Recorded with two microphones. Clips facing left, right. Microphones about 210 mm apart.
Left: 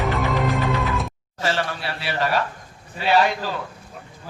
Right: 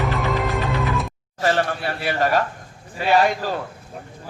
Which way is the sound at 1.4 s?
50° right (ahead or behind).